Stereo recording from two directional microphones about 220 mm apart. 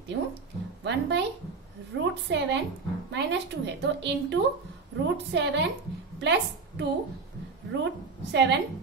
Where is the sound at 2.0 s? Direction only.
55° right (ahead or behind).